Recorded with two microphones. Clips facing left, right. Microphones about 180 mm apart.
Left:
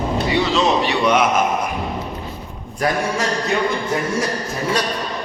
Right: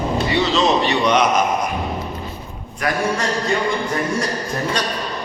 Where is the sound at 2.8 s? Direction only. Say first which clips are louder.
Left 2 dB; 35° left (ahead or behind).